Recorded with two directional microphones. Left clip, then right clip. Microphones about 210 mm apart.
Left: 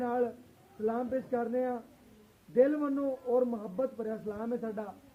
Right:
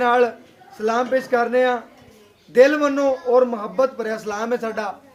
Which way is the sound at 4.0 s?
10° right (ahead or behind).